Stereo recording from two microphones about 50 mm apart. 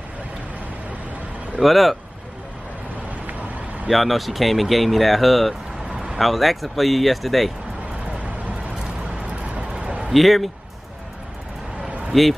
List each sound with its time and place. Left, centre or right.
1.6 s speech: centre
3.8 s speech: centre
5.9 s a sound: centre
6.1 s speech: centre
8.8 s vehicle: right
9.8 s a sound: centre
10.1 s speech: centre
12.1 s speech: centre